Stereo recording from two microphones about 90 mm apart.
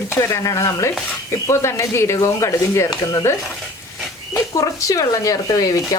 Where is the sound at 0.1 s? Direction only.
35° left (ahead or behind).